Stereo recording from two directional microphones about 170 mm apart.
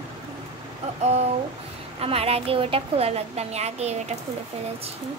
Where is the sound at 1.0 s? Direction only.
40° right (ahead or behind).